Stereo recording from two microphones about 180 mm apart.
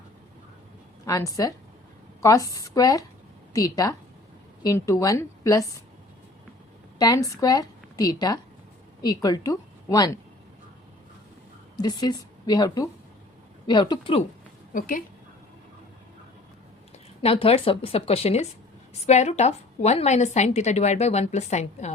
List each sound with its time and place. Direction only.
1.0 s a woman's voice: 20° left (ahead or behind)
7.0 s a woman's voice: 20° left (ahead or behind)
11.8 s a woman's voice: 25° left (ahead or behind)
14.7 s a woman's voice: 50° left (ahead or behind)
17.2 s a woman's voice: 30° left (ahead or behind)